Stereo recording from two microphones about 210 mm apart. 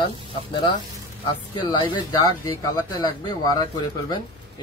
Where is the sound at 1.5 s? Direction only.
20° left (ahead or behind).